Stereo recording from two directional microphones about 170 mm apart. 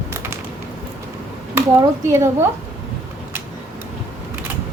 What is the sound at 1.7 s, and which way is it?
Speech, 15° right (ahead or behind).